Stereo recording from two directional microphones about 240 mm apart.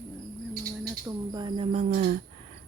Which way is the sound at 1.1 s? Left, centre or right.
Centre.